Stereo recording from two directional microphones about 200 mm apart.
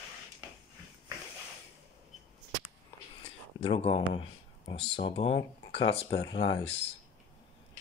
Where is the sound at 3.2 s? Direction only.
30° left (ahead or behind).